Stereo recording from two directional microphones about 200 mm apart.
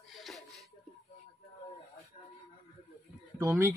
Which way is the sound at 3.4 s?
10° right (ahead or behind).